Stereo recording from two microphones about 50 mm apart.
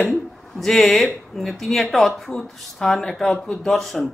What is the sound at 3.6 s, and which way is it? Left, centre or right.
Speech, centre.